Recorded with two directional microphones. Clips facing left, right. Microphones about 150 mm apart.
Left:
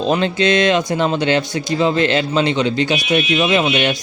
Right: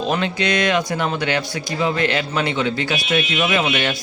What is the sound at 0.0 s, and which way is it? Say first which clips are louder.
Speech: left 5 dB; 30° left (ahead or behind).